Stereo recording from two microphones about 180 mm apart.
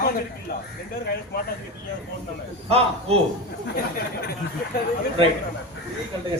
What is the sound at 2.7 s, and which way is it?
Speech, 35° right (ahead or behind).